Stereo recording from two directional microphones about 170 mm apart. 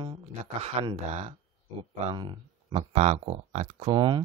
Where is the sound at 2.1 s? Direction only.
30° right (ahead or behind).